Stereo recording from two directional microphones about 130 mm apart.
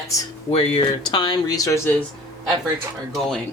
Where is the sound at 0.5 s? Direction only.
45° left (ahead or behind); by 1.9 s 25° left (ahead or behind).